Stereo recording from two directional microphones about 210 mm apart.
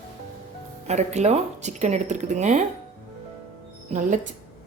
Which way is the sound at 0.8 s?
30° right (ahead or behind).